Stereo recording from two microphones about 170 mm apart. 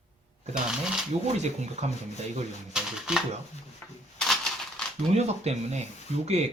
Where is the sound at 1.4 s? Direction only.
40° right (ahead or behind).